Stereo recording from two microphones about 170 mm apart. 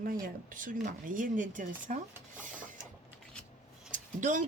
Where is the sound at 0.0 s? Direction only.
55° right (ahead or behind).